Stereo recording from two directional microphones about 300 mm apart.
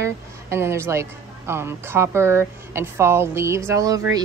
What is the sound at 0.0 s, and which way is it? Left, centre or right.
Speech, centre.